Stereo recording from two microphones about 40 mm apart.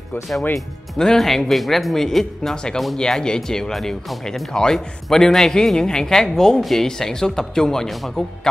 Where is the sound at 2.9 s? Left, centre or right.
Centre.